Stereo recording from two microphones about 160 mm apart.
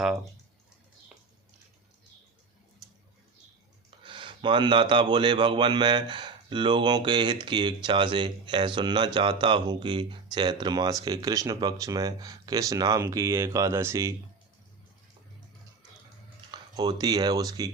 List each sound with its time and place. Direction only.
4.0 s speech: 30° right (ahead or behind); by 14.2 s 15° right (ahead or behind)
16.5 s speech: 25° right (ahead or behind)